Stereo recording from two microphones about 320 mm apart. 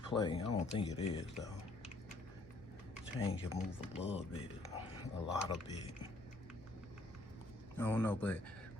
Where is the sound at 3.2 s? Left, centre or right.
Centre.